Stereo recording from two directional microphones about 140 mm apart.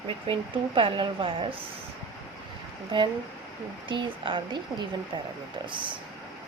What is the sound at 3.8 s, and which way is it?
Speech, 35° right (ahead or behind).